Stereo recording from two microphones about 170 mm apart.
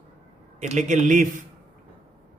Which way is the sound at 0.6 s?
45° right (ahead or behind).